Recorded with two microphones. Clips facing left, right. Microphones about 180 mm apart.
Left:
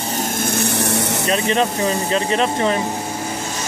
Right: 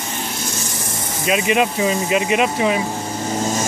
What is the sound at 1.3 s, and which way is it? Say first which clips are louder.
Speech: right 2 dB; 10° right (ahead or behind).